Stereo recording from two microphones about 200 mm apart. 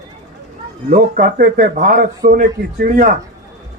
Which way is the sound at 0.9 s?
40° right (ahead or behind).